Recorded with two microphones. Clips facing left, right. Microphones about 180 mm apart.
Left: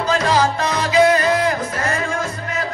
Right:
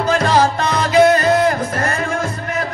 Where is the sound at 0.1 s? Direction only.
55° right (ahead or behind).